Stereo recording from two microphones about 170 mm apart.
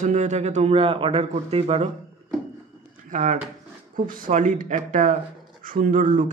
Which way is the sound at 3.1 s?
45° right (ahead or behind).